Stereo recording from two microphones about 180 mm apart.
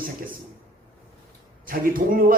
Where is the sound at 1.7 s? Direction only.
50° right (ahead or behind).